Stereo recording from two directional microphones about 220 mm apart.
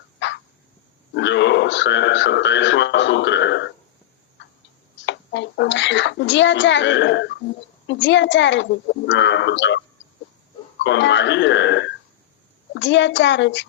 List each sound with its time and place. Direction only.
0.2 s a sound: 55° left (ahead or behind)
1.1 s speech: 55° left (ahead or behind)
5.0 s a child's voice: 55° left (ahead or behind)